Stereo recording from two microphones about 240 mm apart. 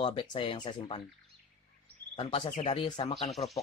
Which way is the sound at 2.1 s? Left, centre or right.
Left.